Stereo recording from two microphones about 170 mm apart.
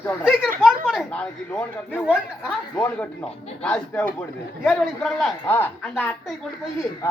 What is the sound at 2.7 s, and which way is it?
A woman's voice, 5° left (ahead or behind).